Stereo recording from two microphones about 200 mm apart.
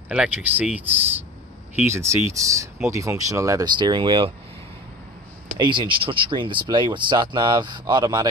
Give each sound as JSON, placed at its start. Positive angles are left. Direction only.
{"t": 0.1, "sound": "speech", "side_deg": -5}
{"t": 5.6, "sound": "speech", "side_deg": -25}